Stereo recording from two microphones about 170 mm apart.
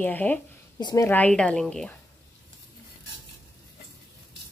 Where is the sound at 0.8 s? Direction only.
25° left (ahead or behind).